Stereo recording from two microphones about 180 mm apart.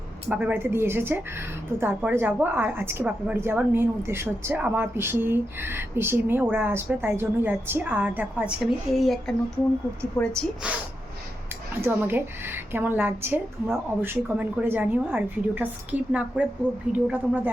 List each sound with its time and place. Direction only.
0.3 s a woman's voice: 10° right (ahead or behind)
10.6 s a woman's voice: 5° right (ahead or behind)